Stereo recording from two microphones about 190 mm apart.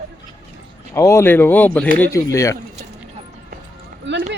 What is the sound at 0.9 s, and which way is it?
Speech, 15° left (ahead or behind).